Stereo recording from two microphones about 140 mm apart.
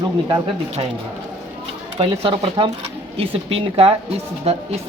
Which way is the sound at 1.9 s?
45° right (ahead or behind).